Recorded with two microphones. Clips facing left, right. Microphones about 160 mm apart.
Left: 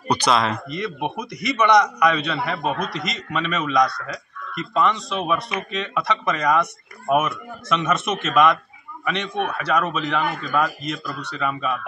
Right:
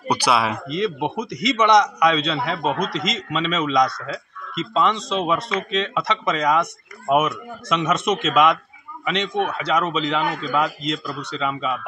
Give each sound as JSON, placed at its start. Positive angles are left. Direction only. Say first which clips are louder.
{"t": 0.1, "sound": "speech", "louder": "even", "side_deg": -10}
{"t": 0.7, "sound": "a man's voice", "louder": "right 4 dB", "side_deg": -20}